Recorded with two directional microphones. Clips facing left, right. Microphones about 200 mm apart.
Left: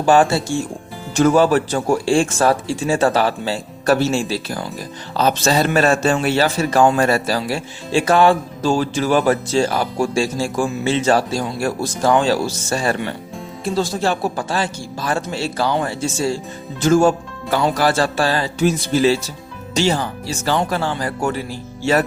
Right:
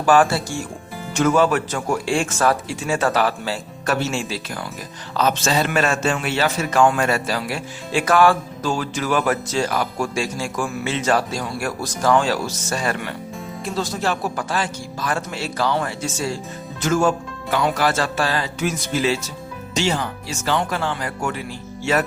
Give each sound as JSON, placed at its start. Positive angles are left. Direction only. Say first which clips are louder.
{"t": 0.0, "sound": "a man's voice", "louder": "left 2 dB", "side_deg": 25}